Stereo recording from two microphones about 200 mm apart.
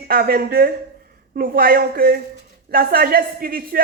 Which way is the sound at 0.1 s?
50° right (ahead or behind).